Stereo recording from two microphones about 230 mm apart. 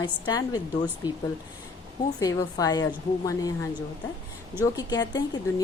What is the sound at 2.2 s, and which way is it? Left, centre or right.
A woman's voice, centre.